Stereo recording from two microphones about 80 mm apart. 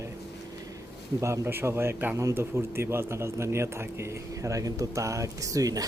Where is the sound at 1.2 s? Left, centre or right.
Right.